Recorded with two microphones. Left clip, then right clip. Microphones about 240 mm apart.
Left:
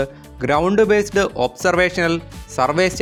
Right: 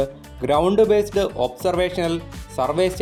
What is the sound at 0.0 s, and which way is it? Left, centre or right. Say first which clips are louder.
Speech: left 1 dB; centre.